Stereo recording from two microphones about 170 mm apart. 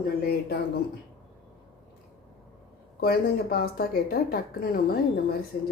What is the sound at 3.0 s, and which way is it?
Speech, 65° left (ahead or behind).